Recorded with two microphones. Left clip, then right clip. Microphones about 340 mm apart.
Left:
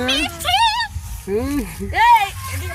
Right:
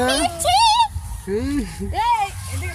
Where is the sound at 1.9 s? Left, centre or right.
Left.